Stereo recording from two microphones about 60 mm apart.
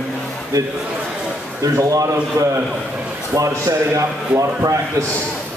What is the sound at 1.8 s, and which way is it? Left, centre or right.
A man's voice, right.